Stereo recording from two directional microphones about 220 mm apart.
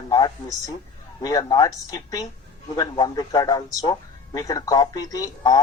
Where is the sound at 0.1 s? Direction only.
15° left (ahead or behind).